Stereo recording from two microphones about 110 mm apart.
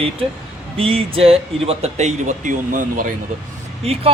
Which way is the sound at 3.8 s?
65° right (ahead or behind).